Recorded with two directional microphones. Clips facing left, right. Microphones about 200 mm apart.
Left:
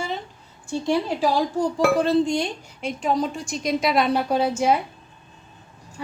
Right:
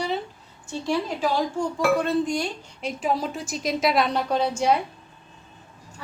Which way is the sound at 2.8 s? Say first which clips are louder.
Left 3 dB; 5° right (ahead or behind).